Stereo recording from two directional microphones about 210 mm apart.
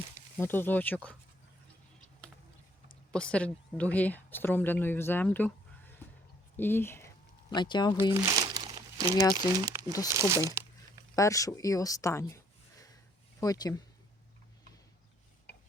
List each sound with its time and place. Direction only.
0.3 s a woman's voice: 10° left (ahead or behind)
3.1 s a woman's voice: 5° left (ahead or behind)
7.5 s speech: 20° left (ahead or behind)
8.1 s crumpling: 15° right (ahead or behind)
9.3 s speech: 15° right (ahead or behind)
11.1 s a woman's voice: 15° left (ahead or behind)
13.4 s a woman's voice: 15° left (ahead or behind)
15.5 s tick-tock: 55° left (ahead or behind)